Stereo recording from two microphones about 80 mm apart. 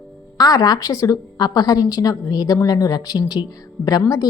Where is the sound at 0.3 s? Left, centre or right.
Left.